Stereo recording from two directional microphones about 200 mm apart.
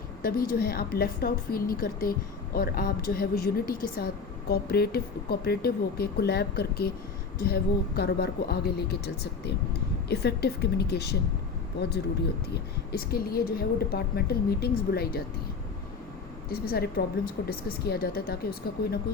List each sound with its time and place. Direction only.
0.2 s a woman's voice: 50° left (ahead or behind)
16.5 s a woman's voice: 50° left (ahead or behind)